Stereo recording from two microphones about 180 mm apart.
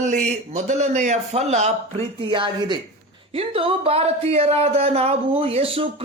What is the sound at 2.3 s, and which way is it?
Speech, 25° right (ahead or behind).